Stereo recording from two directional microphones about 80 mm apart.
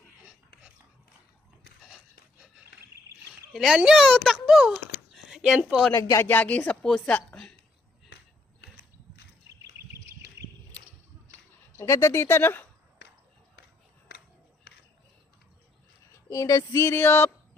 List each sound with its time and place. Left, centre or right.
3.5 s a child's voice: centre
5.1 s a sound: centre
5.9 s speech: left
6.1 s speech: left
6.8 s a woman's voice: centre
7.1 s a sound: centre
11.8 s music: left
16.3 s music: left